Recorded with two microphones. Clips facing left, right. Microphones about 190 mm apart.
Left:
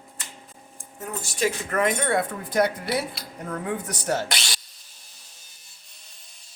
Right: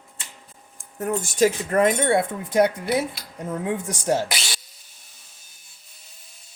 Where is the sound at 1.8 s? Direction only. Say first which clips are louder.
Right 4 dB; 25° right (ahead or behind).